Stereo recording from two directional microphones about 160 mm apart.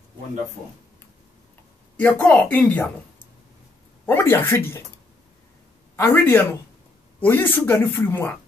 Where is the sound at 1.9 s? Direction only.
10° left (ahead or behind).